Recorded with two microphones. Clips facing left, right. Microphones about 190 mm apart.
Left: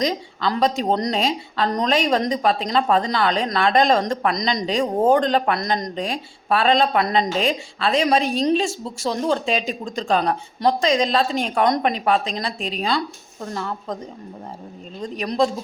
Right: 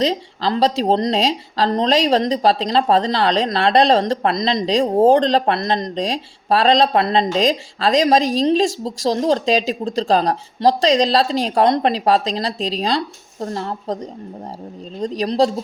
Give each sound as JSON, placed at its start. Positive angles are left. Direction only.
{"t": 0.0, "sound": "speech", "side_deg": -30}
{"t": 15.0, "sound": "speech", "side_deg": -35}